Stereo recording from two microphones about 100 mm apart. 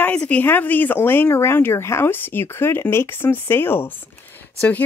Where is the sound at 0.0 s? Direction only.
10° left (ahead or behind).